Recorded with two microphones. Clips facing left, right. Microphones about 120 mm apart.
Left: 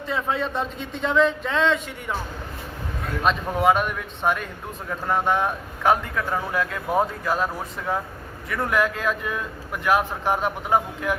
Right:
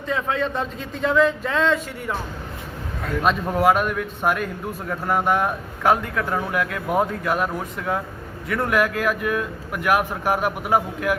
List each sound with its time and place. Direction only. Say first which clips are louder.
0.1 s a man's voice: right 2 dB; centre (ahead or behind)
3.2 s a man's voice: right 1 dB; centre (ahead or behind)
8.8 s speech: right 2 dB; 10° right (ahead or behind)